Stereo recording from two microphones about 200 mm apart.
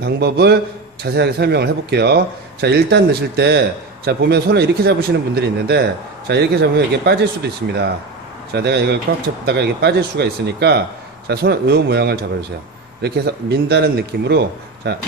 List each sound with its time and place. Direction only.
0.0 s a man's voice: 55° right (ahead or behind)